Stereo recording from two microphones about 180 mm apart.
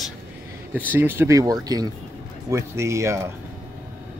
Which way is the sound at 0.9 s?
10° right (ahead or behind).